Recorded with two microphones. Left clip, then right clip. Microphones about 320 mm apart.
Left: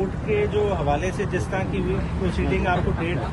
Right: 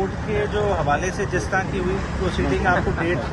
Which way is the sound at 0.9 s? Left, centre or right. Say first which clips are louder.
Right 2 dB; centre.